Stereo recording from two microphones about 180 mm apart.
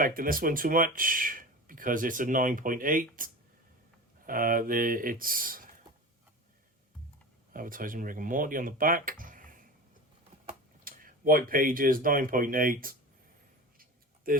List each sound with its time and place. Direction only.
0.0 s speech: 50° right (ahead or behind)
7.5 s speech: 50° right (ahead or behind)
10.8 s speech: 50° right (ahead or behind)
14.3 s speech: 50° right (ahead or behind)